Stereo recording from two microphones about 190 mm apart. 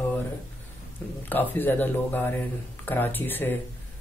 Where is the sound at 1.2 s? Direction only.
10° left (ahead or behind).